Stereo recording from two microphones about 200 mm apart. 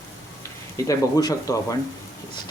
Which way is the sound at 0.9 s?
15° left (ahead or behind).